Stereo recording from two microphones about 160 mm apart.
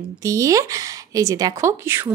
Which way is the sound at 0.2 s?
20° right (ahead or behind).